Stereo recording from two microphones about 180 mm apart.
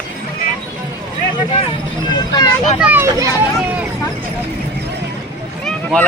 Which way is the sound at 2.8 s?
10° right (ahead or behind).